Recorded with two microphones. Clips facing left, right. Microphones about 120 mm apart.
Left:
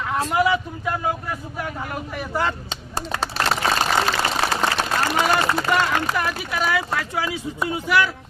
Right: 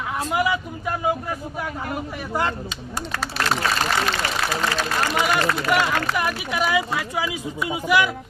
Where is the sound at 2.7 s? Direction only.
30° left (ahead or behind).